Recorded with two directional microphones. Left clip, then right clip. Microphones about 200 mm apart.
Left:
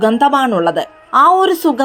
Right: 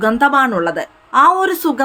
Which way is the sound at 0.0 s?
15° left (ahead or behind).